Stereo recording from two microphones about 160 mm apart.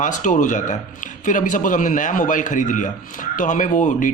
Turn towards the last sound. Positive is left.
turn(degrees=55)  # may be behind; listen again after turning